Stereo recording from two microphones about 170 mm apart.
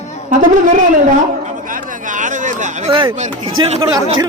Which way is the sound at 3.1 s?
45° right (ahead or behind).